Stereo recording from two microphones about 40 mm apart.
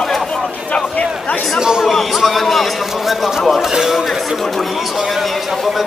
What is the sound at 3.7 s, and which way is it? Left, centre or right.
Speech, centre.